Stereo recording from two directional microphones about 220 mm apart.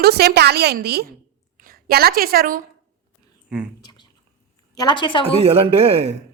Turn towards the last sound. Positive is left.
turn(degrees=-25)  # may be behind; listen again after turning